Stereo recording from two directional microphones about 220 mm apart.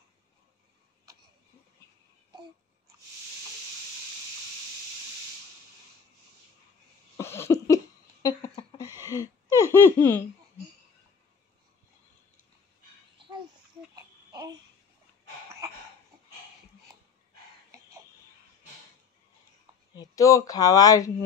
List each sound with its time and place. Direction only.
7.2 s cough: 10° left (ahead or behind)
9.1 s speech: 15° left (ahead or behind)
14.3 s babbling: 15° right (ahead or behind)
20.0 s speech: 15° left (ahead or behind)